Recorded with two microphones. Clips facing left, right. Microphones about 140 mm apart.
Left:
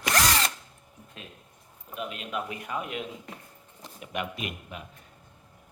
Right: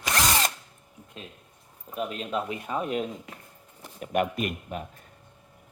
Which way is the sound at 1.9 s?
40° right (ahead or behind).